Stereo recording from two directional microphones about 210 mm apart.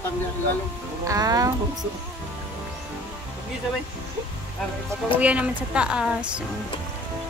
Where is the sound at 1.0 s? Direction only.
15° right (ahead or behind).